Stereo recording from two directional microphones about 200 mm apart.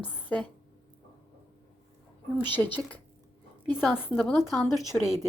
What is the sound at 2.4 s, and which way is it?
Speech, 10° left (ahead or behind).